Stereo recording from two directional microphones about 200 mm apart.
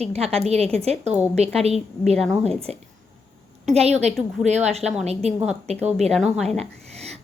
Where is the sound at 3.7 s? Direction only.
30° right (ahead or behind).